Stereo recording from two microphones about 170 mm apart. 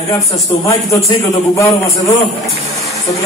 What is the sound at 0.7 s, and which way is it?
A man's voice, 20° left (ahead or behind).